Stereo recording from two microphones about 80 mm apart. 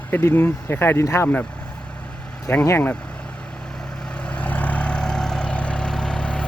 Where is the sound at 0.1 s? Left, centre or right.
Left.